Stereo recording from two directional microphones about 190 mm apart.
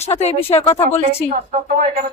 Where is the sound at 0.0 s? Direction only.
35° left (ahead or behind).